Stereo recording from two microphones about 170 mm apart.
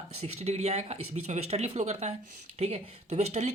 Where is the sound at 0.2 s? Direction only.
40° right (ahead or behind).